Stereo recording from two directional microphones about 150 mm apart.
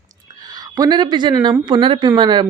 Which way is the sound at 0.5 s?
25° right (ahead or behind).